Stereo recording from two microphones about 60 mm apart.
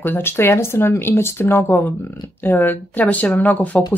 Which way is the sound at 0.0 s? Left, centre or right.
Left.